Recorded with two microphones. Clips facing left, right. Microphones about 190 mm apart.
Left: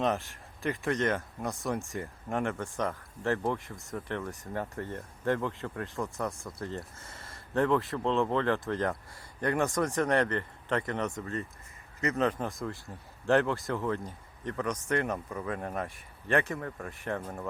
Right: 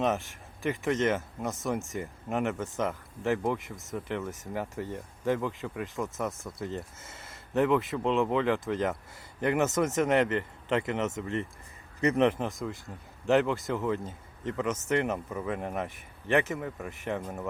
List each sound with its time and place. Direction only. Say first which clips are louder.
0.0 s speech: right 1 dB; centre (ahead or behind)
6.7 s speech: right 2 dB; 20° right (ahead or behind)
7.6 s speech: right 2 dB; 5° right (ahead or behind)
9.6 s speech: right 2 dB; 20° right (ahead or behind)
12.5 s speech: right 1 dB; centre (ahead or behind); by 16.6 s 20° right (ahead or behind)
16.6 s speech: right 2 dB; 10° right (ahead or behind)
17.0 s speech: right 1 dB; 20° right (ahead or behind)